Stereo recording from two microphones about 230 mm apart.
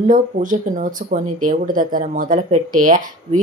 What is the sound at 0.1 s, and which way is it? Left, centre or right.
Speech, right.